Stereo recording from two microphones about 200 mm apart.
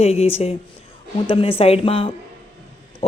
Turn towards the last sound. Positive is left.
turn(degrees=30)  # may be behind; listen again after turning